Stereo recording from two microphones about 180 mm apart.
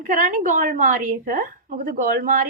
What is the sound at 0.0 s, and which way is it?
A woman's voice, 50° right (ahead or behind).